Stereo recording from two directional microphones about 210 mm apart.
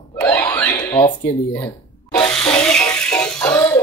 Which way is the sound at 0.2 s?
10° left (ahead or behind).